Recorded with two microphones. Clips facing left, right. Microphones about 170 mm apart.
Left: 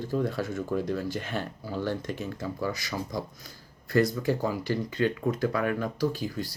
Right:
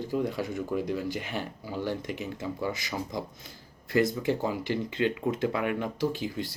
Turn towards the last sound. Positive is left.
turn(degrees=-20)  # may be behind; listen again after turning